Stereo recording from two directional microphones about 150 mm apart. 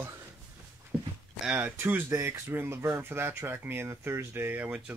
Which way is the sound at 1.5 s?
15° right (ahead or behind).